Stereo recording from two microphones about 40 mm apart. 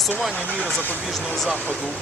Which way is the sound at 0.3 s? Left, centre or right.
Left.